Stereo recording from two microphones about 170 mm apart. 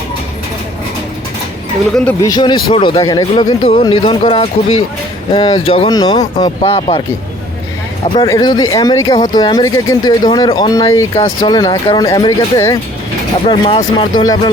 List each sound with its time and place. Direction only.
2.2 s speech: 25° left (ahead or behind)
3.6 s speech: 35° left (ahead or behind)
8.0 s speech: 30° left (ahead or behind)
13.5 s speech: 30° left (ahead or behind)